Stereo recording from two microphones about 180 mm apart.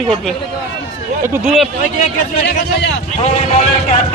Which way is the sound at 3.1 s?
35° left (ahead or behind).